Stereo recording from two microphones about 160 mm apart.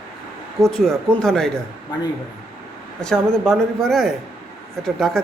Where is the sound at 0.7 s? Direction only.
Centre (ahead or behind).